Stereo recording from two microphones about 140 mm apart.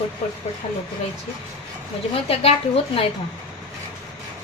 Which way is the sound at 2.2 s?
45° left (ahead or behind).